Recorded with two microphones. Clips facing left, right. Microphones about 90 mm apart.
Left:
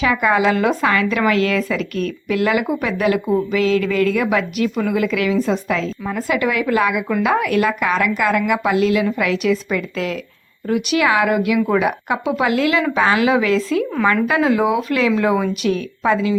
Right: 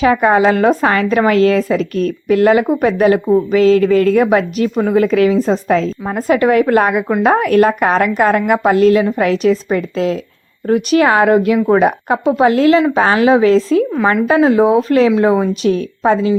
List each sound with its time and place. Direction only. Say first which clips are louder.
0.0 s a woman's voice: right 5 dB; 35° right (ahead or behind)